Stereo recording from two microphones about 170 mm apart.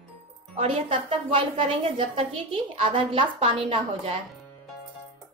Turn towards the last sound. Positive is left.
turn(degrees=-35)  # may be behind; listen again after turning